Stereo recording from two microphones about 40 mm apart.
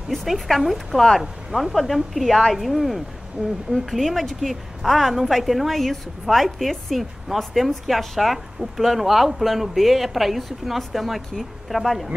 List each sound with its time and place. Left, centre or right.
0.1 s a woman's voice: centre
3.4 s a woman's voice: right
3.7 s a woman's voice: centre